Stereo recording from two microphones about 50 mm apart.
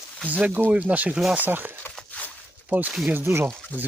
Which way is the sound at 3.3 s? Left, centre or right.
Right.